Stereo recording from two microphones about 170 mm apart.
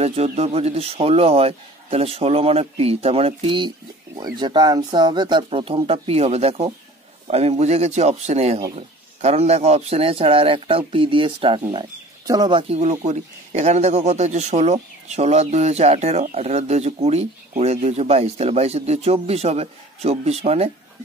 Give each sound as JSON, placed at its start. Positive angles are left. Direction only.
{"t": 0.0, "sound": "speech", "side_deg": -40}